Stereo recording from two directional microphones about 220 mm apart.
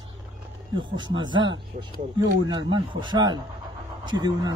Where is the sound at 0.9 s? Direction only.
20° right (ahead or behind).